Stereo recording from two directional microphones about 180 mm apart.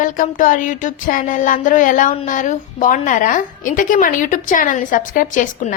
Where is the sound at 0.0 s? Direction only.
45° left (ahead or behind).